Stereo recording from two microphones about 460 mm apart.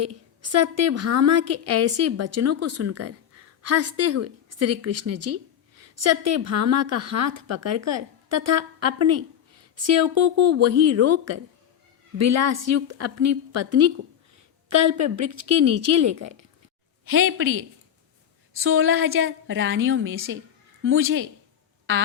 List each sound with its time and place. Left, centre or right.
0.0 s a woman's voice: right